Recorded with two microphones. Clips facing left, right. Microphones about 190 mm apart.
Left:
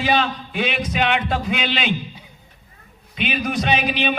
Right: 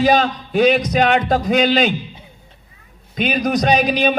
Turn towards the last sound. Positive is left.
turn(degrees=-40)  # may be behind; listen again after turning